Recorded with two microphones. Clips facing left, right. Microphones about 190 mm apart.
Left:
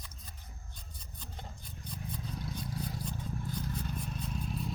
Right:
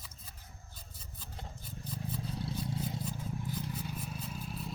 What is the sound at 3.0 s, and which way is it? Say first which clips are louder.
Vehicle: even; 5° right (ahead or behind).